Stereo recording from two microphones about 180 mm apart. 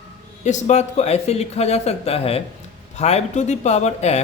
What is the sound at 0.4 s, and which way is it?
Speech, 40° left (ahead or behind).